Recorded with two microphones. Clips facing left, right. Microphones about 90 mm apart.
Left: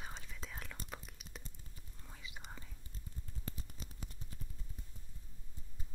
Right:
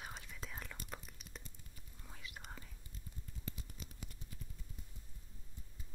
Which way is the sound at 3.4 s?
35° left (ahead or behind).